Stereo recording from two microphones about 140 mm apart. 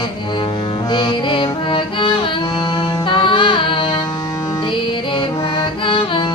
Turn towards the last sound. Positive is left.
turn(degrees=35)  # may be behind; listen again after turning